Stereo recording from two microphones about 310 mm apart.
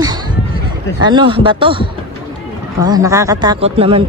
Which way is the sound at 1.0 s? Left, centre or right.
Centre.